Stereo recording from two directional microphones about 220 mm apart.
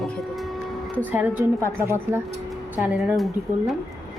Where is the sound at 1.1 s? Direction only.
10° right (ahead or behind).